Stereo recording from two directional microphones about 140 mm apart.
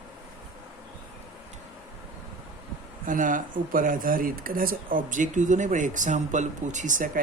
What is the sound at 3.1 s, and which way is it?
Speech, 70° right (ahead or behind).